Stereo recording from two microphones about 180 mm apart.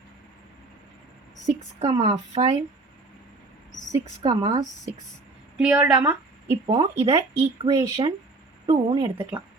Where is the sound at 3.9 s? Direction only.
20° right (ahead or behind).